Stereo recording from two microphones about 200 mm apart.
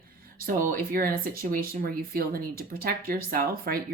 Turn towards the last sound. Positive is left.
turn(degrees=-50)  # may be behind; listen again after turning